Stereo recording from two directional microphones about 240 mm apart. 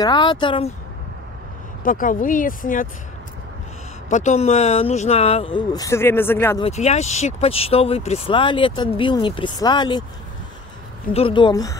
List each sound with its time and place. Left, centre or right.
0.0 s speech: centre
1.9 s speech: left
4.1 s speech: left; by 6.6 s centre
6.6 s speech: left
11.1 s speech: left